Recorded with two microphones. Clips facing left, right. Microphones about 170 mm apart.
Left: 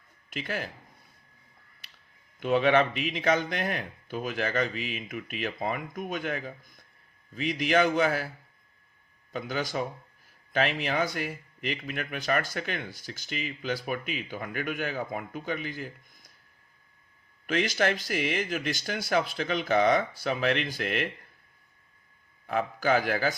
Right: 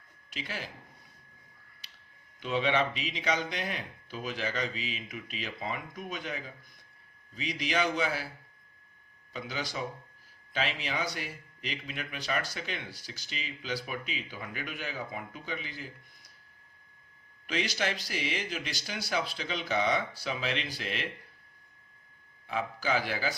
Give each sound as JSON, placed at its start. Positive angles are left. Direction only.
{"t": 0.3, "sound": "speech", "side_deg": 50}
{"t": 2.4, "sound": "speech", "side_deg": 55}
{"t": 9.3, "sound": "speech", "side_deg": 50}
{"t": 17.4, "sound": "speech", "side_deg": 50}
{"t": 22.4, "sound": "speech", "side_deg": 50}